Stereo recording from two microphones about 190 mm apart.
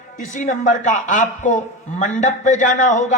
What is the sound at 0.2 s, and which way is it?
A man's voice, 40° left (ahead or behind).